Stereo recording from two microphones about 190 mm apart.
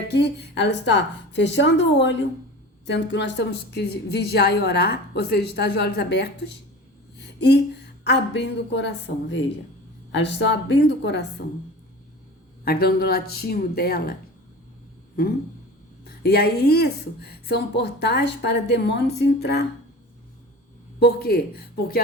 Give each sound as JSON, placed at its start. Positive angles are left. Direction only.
{"t": 0.1, "sound": "a woman's voice", "side_deg": 60}
{"t": 7.2, "sound": "a sound", "side_deg": 60}
{"t": 8.0, "sound": "a woman's voice", "side_deg": 60}
{"t": 12.6, "sound": "speech", "side_deg": 55}
{"t": 16.0, "sound": "speech", "side_deg": 55}
{"t": 21.0, "sound": "speech", "side_deg": 55}